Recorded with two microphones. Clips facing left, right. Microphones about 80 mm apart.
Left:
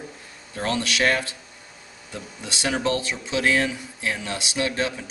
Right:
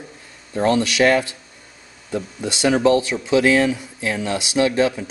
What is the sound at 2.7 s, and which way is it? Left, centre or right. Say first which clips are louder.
Speech: right 8 dB; right.